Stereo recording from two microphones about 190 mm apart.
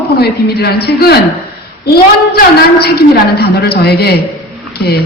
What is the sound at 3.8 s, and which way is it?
Speech, 55° left (ahead or behind).